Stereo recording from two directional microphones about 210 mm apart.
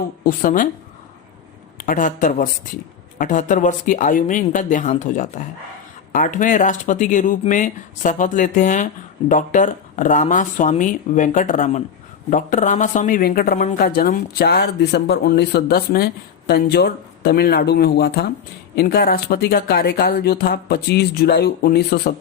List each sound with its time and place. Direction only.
0.3 s speech: 40° left (ahead or behind)
1.8 s speech: 40° left (ahead or behind)